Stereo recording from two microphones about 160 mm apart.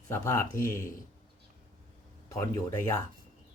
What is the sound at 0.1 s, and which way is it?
Speech, 15° left (ahead or behind).